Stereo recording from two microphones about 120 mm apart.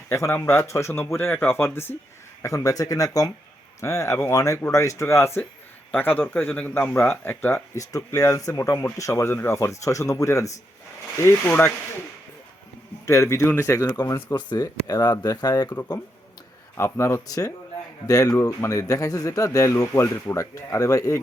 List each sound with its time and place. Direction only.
0.1 s speech: 20° left (ahead or behind)
13.1 s speech: 25° left (ahead or behind)